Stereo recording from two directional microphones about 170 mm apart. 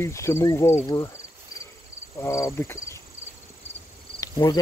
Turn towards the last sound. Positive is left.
turn(degrees=20)  # may be behind; listen again after turning